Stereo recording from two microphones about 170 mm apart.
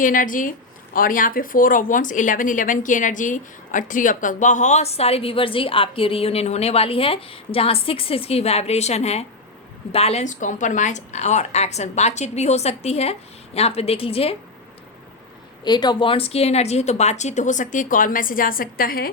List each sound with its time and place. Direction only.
0.0 s a woman's voice: 50° left (ahead or behind); by 14.3 s 35° left (ahead or behind)
15.6 s a woman's voice: 25° left (ahead or behind); by 19.1 s 60° left (ahead or behind)